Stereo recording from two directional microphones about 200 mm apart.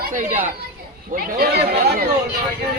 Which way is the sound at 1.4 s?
50° right (ahead or behind).